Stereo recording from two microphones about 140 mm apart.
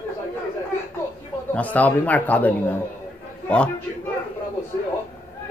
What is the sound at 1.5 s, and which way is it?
Speech, 10° left (ahead or behind).